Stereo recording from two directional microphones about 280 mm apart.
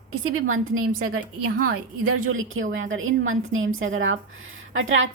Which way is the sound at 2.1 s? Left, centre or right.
Right.